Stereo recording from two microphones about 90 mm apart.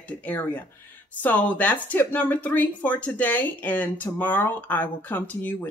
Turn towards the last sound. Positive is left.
turn(degrees=20)  # may be behind; listen again after turning